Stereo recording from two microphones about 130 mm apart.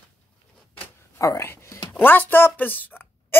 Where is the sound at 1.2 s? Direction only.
25° left (ahead or behind).